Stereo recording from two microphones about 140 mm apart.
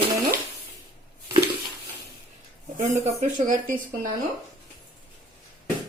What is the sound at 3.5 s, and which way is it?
Speech, 75° right (ahead or behind).